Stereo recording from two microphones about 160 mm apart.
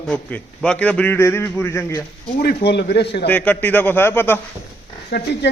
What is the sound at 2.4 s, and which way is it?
Speech, 85° left.